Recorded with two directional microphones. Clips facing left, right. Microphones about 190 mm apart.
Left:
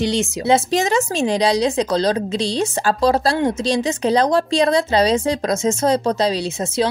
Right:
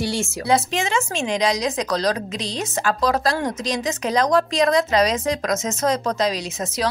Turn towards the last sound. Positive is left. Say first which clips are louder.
# left 6 dB
turn(degrees=30)  # may be behind; listen again after turning